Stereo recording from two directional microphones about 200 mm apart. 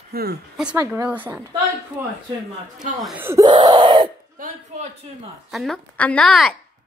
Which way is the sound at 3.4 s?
20° right (ahead or behind).